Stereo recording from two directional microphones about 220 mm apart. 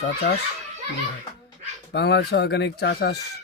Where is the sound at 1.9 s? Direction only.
50° left (ahead or behind).